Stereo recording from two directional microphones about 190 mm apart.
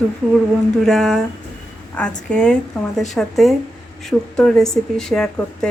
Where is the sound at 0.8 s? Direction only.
Centre (ahead or behind).